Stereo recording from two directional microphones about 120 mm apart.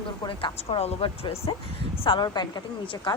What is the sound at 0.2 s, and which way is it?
Speech, 40° left (ahead or behind).